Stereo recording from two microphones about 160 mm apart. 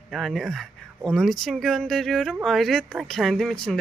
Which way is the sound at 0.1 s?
Centre (ahead or behind).